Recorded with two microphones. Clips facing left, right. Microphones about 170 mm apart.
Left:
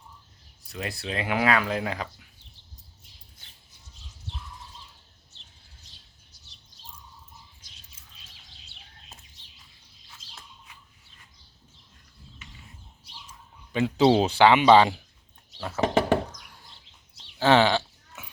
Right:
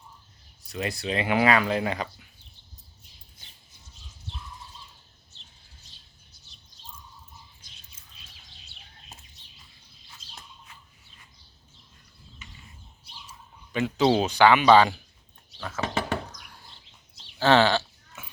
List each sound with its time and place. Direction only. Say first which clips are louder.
0.7 s speech: right 3 dB; centre (ahead or behind)
13.7 s speech: left 2 dB; 30° left (ahead or behind)
17.4 s a sound: even; 15° left (ahead or behind)